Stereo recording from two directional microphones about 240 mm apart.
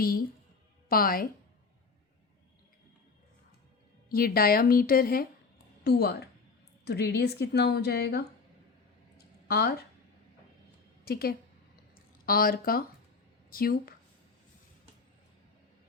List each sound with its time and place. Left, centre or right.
0.0 s a woman's voice: left
4.1 s a woman's voice: left
9.1 s a sound: left
11.0 s a woman's voice: left